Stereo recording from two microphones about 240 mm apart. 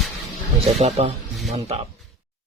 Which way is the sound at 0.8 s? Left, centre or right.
Right.